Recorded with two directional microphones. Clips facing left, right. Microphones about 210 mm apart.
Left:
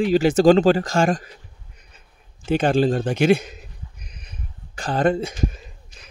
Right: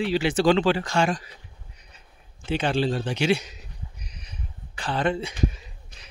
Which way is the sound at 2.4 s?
45° left (ahead or behind).